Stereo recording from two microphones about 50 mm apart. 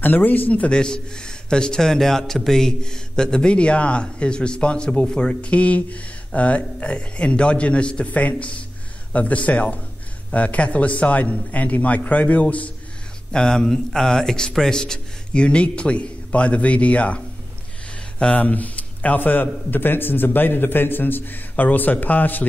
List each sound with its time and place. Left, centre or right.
0.0 s a man's voice: left
0.7 s a man's voice: centre
13.3 s a man's voice: centre
18.3 s a man's voice: left